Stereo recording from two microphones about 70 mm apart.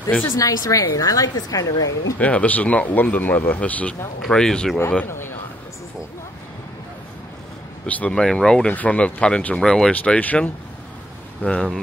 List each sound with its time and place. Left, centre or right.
0.3 s a woman's voice: left
2.1 s speech: left
7.8 s speech: centre
11.4 s speech: centre